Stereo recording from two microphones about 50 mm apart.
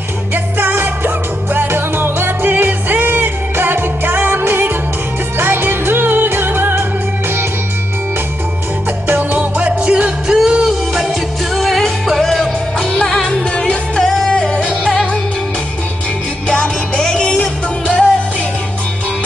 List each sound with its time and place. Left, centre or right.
0.3 s music: right
9.3 s music: right
10.2 s music: centre
11.5 s music: centre
14.0 s music: centre
14.3 s music: centre
14.6 s music: centre
16.4 s music: centre